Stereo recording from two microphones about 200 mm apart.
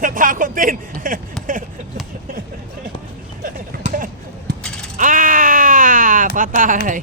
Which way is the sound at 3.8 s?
45° right (ahead or behind).